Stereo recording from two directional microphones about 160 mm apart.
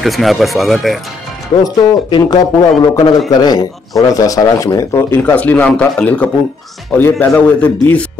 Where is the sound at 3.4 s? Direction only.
25° left (ahead or behind).